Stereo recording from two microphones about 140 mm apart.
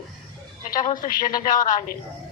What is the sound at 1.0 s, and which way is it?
Speech, 75° left (ahead or behind).